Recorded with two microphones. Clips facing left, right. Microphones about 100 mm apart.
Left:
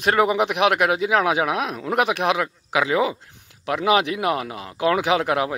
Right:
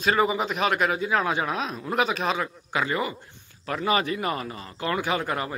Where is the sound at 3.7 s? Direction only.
70° left (ahead or behind).